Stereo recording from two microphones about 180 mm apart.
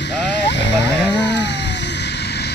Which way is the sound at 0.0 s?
75° left (ahead or behind).